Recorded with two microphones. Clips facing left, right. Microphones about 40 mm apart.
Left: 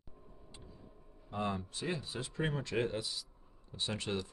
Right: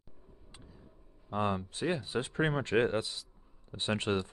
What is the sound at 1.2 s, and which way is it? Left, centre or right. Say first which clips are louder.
Speech: right 5 dB; right.